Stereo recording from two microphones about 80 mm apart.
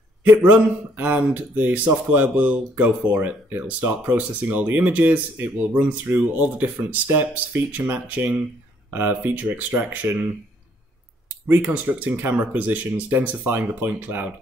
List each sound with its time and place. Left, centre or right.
0.4 s speech: centre
11.4 s speech: right